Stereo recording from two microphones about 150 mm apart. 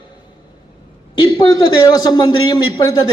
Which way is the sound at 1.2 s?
30° left (ahead or behind).